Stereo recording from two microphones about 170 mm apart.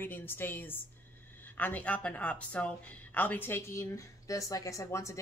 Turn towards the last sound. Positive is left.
turn(degrees=20)  # may be behind; listen again after turning